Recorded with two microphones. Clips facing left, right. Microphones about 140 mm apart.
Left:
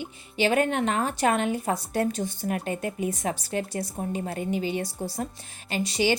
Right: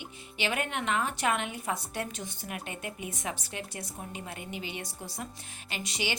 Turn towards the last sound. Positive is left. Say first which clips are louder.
# left 10 dB
turn(degrees=35)  # may be behind; listen again after turning